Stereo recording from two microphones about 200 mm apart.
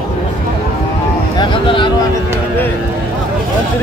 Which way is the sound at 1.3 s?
25° left (ahead or behind).